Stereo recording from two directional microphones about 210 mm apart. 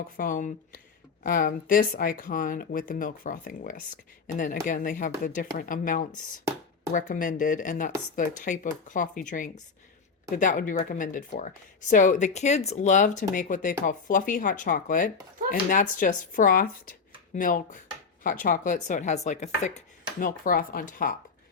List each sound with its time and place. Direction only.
0.2 s speech: 40° left (ahead or behind)